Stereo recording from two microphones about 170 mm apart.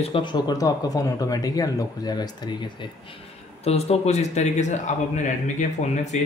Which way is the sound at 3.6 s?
35° left (ahead or behind).